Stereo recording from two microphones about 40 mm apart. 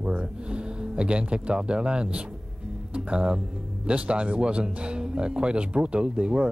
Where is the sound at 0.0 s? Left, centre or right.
Right.